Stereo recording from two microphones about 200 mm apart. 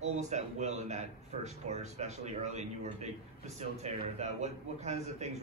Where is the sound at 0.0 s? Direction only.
35° right (ahead or behind).